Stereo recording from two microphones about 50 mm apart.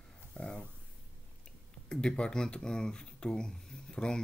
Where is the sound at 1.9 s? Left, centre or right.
Centre.